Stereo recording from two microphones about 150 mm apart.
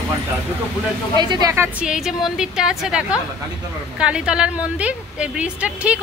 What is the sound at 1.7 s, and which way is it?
A woman's voice, 5° right (ahead or behind).